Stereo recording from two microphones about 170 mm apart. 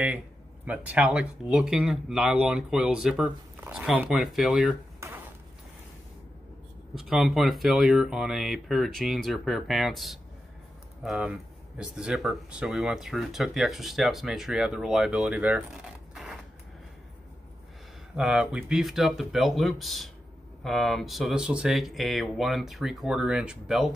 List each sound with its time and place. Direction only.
0.7 s speech: 10° right (ahead or behind)
5.0 s a sound: 15° right (ahead or behind)
7.0 s speech: centre (ahead or behind)
18.1 s speech: 5° right (ahead or behind)